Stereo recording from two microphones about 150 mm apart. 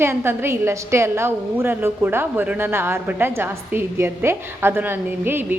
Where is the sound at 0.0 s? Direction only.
15° right (ahead or behind).